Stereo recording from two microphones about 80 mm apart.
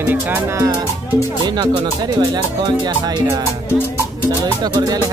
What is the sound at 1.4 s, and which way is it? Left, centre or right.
Speech, right.